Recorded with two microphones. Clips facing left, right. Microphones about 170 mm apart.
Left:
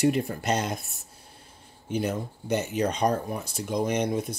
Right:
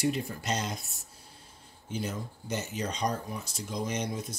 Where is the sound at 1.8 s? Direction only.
60° left (ahead or behind).